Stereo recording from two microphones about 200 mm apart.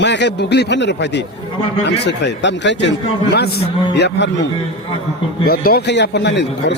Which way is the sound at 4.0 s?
60° left (ahead or behind).